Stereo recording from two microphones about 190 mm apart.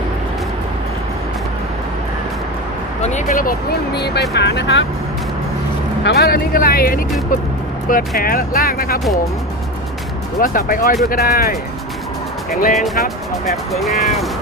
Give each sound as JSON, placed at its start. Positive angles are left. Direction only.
{"t": 3.0, "sound": "speech", "side_deg": 40}
{"t": 6.1, "sound": "speech", "side_deg": 55}
{"t": 10.4, "sound": "speech", "side_deg": 45}
{"t": 12.7, "sound": "speech", "side_deg": 0}